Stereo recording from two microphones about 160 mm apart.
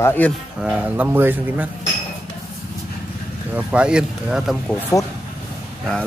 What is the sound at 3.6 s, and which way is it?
Speech, 5° right (ahead or behind).